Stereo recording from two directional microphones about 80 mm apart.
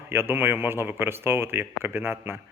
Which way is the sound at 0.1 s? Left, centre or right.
Right.